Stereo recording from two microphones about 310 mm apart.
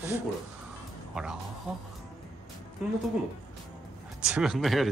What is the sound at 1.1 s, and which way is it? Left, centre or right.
Speech, centre.